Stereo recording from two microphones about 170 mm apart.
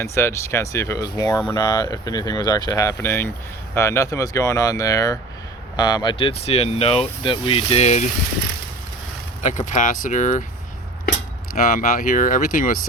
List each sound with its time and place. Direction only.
0.0 s speech: 15° left (ahead or behind); by 8.0 s 40° left (ahead or behind)
9.4 s speech: 45° left (ahead or behind)
11.5 s speech: 50° left (ahead or behind)